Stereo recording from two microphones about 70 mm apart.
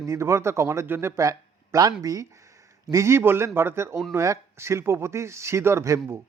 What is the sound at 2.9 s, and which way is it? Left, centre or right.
Speech, right.